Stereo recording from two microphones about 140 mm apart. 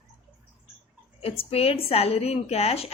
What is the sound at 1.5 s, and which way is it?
A woman's voice, 45° left (ahead or behind).